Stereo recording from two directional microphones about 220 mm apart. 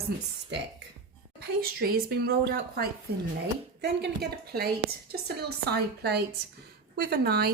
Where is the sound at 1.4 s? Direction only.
45° right (ahead or behind).